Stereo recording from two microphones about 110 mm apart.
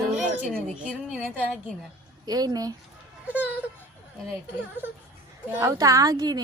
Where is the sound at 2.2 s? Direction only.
35° right (ahead or behind).